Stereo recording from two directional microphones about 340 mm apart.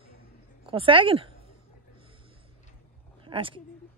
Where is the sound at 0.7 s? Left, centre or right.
Centre.